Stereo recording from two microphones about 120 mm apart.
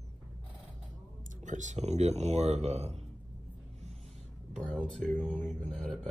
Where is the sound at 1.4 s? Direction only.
90° right; by 3.0 s 65° right (ahead or behind).